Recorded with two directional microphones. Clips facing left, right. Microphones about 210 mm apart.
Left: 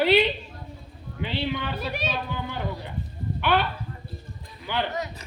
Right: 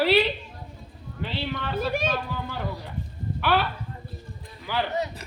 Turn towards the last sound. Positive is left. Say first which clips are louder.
# right 3 dB
turn(degrees=-30)  # may be behind; listen again after turning